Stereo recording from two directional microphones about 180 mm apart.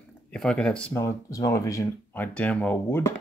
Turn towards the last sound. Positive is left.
turn(degrees=10)  # may be behind; listen again after turning